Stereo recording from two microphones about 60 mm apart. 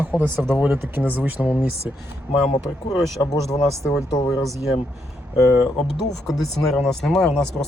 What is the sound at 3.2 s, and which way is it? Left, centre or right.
Speech, left.